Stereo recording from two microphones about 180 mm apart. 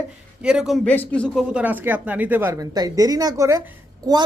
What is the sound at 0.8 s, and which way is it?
Speech, 5° left (ahead or behind).